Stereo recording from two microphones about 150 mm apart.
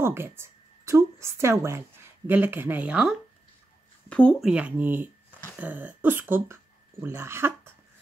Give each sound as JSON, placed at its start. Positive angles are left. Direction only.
{"t": 0.0, "sound": "speech", "side_deg": -15}
{"t": 4.1, "sound": "speech", "side_deg": 5}
{"t": 4.5, "sound": "speech", "side_deg": -10}